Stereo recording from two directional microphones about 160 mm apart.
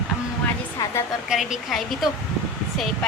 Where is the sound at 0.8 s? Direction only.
20° left (ahead or behind).